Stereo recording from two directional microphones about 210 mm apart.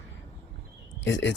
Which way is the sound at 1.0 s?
60° left (ahead or behind).